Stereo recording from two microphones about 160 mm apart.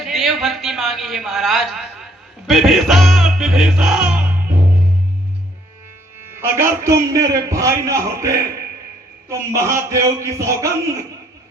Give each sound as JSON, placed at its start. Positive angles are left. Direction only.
{"t": 0.0, "sound": "a man's voice", "side_deg": 0}
{"t": 2.5, "sound": "music", "side_deg": 0}
{"t": 6.3, "sound": "a man's voice", "side_deg": -15}